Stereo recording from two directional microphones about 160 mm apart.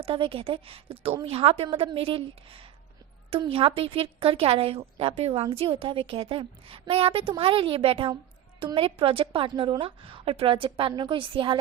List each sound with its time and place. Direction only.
0.0 s a woman's voice: 35° right (ahead or behind)